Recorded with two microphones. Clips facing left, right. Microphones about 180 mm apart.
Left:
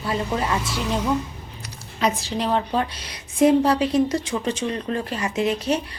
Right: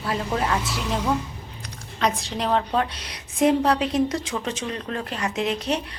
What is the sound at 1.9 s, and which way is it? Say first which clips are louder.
A woman's voice: left 2 dB; 5° left (ahead or behind).